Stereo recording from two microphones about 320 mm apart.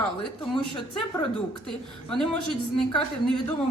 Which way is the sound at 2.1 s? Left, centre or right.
Centre.